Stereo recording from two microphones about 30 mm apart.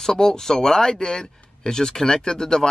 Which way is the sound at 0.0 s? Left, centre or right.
Centre.